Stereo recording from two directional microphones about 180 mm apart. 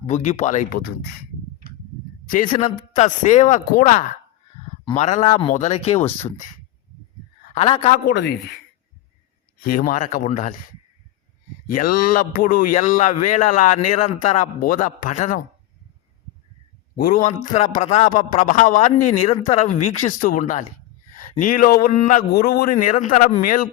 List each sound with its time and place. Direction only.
0.0 s speech: 40° left (ahead or behind); by 0.9 s 55° left (ahead or behind)
2.2 s speech: 50° left (ahead or behind)
7.5 s a man's voice: 35° left (ahead or behind)
9.6 s speech: 50° left (ahead or behind)
11.7 s speech: 50° left (ahead or behind)
17.0 s speech: 50° left (ahead or behind)